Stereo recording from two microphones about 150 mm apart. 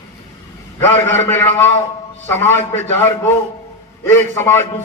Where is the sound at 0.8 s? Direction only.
15° left (ahead or behind).